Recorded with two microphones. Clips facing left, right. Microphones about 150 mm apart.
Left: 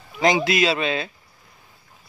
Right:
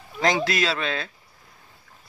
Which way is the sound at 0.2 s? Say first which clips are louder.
Left 4 dB; 15° left (ahead or behind).